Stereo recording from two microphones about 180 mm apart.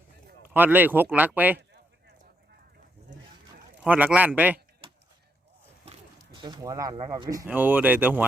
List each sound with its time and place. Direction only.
0.5 s speech: 10° right (ahead or behind)
1.5 s a sound: 70° right (ahead or behind)
3.8 s speech: 10° right (ahead or behind)
6.1 s speech: 25° right (ahead or behind); by 8.2 s 10° right (ahead or behind)